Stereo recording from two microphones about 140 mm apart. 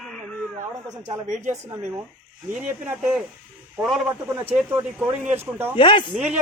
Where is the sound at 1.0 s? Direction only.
60° right (ahead or behind).